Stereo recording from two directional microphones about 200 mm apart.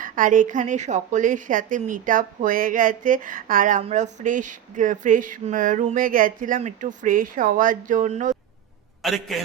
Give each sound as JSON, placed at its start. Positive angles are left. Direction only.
{"t": 0.0, "sound": "a woman's voice", "side_deg": -40}
{"t": 9.0, "sound": "a man's voice", "side_deg": 0}